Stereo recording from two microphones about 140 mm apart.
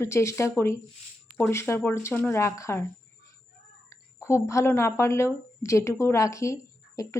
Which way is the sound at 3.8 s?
20° left (ahead or behind).